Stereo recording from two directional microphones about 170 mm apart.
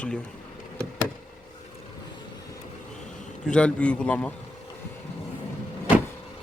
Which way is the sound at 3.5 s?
5° left (ahead or behind).